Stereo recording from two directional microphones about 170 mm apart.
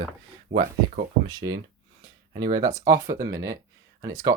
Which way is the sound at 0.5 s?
60° right (ahead or behind).